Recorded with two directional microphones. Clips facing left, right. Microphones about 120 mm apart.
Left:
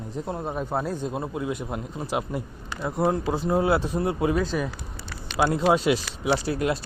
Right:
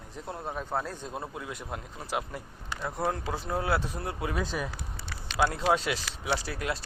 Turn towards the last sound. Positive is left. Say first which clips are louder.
# left 7 dB
turn(degrees=20)  # may be behind; listen again after turning